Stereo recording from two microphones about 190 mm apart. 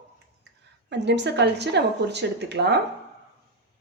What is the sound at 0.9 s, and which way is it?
A woman's voice, 65° right (ahead or behind).